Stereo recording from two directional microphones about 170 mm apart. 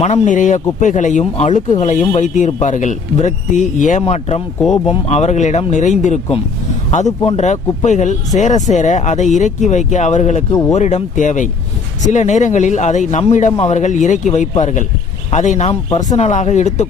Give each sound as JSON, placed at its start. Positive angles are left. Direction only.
{"t": 0.0, "sound": "a man's voice", "side_deg": 45}
{"t": 10.5, "sound": "speech", "side_deg": 20}
{"t": 10.8, "sound": "a man's voice", "side_deg": 45}